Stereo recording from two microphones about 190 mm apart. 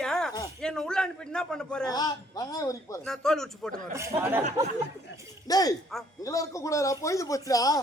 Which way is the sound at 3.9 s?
15° right (ahead or behind).